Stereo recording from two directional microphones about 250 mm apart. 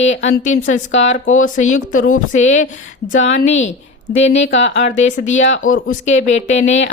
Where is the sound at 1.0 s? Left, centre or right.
Left.